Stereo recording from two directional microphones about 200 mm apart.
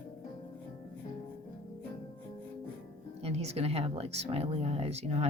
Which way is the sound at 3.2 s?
30° right (ahead or behind).